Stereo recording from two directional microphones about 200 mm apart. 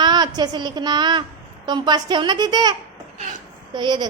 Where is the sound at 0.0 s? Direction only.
20° right (ahead or behind).